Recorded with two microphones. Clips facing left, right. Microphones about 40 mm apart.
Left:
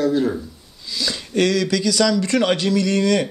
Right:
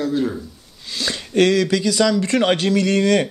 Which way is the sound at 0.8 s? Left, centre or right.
Right.